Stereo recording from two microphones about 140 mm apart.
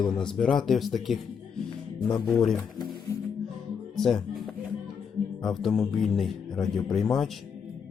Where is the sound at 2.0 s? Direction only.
30° left (ahead or behind).